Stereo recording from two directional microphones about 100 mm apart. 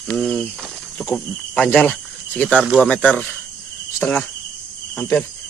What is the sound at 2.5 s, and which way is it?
Speech, 10° right (ahead or behind).